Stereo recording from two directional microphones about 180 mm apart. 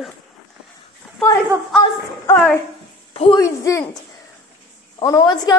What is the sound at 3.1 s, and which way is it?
Speech, 30° left (ahead or behind).